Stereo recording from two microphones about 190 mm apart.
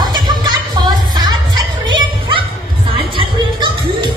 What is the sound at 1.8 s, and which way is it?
Music, 25° right (ahead or behind).